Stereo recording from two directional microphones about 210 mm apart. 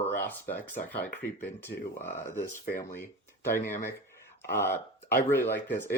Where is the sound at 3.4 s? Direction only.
10° left (ahead or behind).